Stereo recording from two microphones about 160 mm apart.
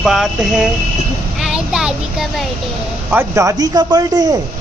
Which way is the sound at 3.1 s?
20° right (ahead or behind).